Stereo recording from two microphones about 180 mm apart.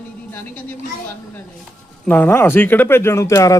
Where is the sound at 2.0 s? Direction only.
10° left (ahead or behind).